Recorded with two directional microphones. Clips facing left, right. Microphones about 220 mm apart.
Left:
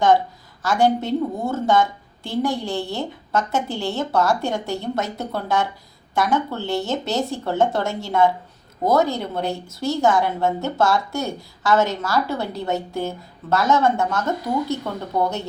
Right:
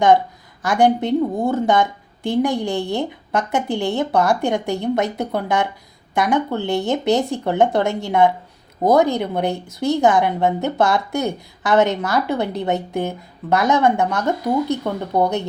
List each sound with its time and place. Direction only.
0.6 s a woman's voice: 15° right (ahead or behind)